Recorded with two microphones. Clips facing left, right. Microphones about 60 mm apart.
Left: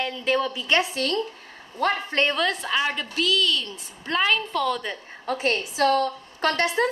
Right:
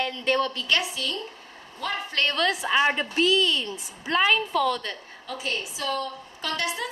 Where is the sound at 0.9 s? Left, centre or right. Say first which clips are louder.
Left 6 dB; left.